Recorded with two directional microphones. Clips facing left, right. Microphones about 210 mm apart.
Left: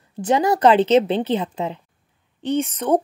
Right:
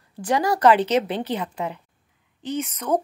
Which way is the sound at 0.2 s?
20° left (ahead or behind).